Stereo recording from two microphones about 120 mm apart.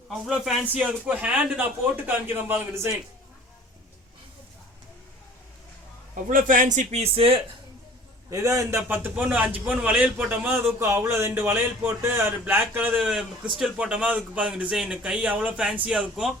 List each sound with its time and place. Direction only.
0.1 s a man's voice: centre (ahead or behind); by 2.9 s 20° right (ahead or behind)
6.2 s a man's voice: 90° right; by 7.4 s 50° right (ahead or behind)
8.3 s a man's voice: 25° right (ahead or behind); by 16.3 s 5° right (ahead or behind)